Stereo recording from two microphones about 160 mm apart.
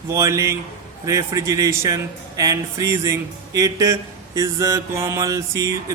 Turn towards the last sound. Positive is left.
turn(degrees=-20)  # may be behind; listen again after turning